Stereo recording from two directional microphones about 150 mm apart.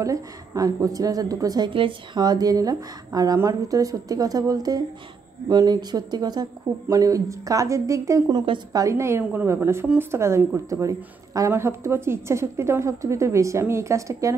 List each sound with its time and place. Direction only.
0.0 s a woman's voice: 20° right (ahead or behind)